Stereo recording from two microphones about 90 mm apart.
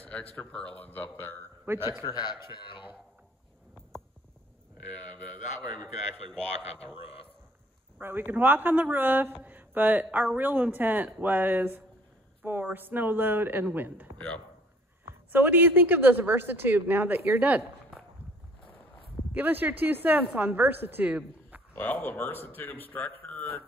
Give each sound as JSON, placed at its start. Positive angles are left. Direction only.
{"t": 0.0, "sound": "a man's voice", "side_deg": 15}
{"t": 1.7, "sound": "speech", "side_deg": -25}
{"t": 2.0, "sound": "a man's voice", "side_deg": 50}
{"t": 8.0, "sound": "speech", "side_deg": -25}
{"t": 14.1, "sound": "speech", "side_deg": 15}
{"t": 15.3, "sound": "speech", "side_deg": -20}
{"t": 19.3, "sound": "a woman's voice", "side_deg": -20}
{"t": 21.7, "sound": "a man's voice", "side_deg": 20}
{"t": 22.9, "sound": "a sound", "side_deg": 15}